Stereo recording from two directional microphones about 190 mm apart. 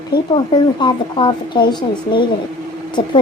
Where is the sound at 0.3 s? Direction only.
25° left (ahead or behind).